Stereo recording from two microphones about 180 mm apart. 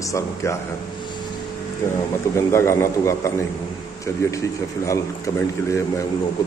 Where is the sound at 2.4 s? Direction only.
15° left (ahead or behind).